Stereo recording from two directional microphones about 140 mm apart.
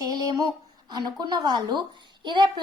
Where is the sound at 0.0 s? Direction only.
25° right (ahead or behind).